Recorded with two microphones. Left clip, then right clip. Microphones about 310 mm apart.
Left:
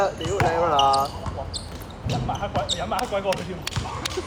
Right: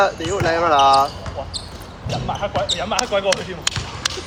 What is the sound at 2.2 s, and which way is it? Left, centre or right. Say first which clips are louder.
Basketball bounce: right 5 dB; right.